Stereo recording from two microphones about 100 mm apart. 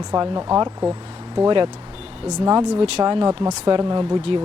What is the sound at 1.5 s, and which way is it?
Speech, 50° right (ahead or behind).